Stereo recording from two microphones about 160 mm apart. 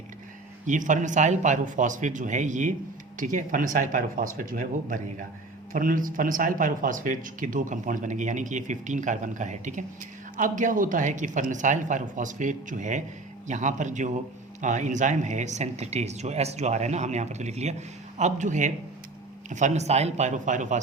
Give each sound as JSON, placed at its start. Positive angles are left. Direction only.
{"t": 0.7, "sound": "speech", "side_deg": -50}